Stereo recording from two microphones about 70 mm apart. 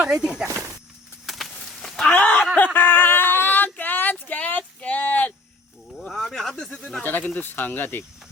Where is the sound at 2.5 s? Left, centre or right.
Left.